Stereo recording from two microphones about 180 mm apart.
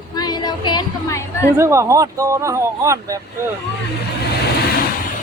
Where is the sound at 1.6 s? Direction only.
15° right (ahead or behind).